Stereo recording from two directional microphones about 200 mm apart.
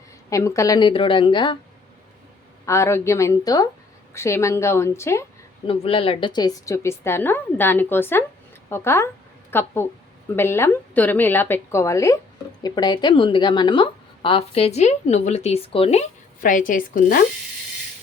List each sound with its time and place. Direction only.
0.3 s a woman's voice: 15° left (ahead or behind)
2.6 s a woman's voice: 15° left (ahead or behind)
5.6 s a woman's voice: 25° left (ahead or behind); by 17.2 s 45° left (ahead or behind)